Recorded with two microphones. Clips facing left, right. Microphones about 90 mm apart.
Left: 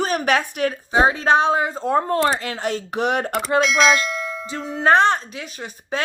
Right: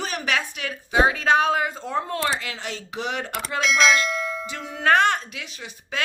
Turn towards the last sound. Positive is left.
turn(degrees=45)  # may be behind; listen again after turning